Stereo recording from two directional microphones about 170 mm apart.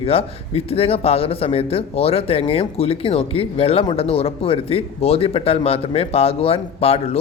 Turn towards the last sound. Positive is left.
turn(degrees=35)  # may be behind; listen again after turning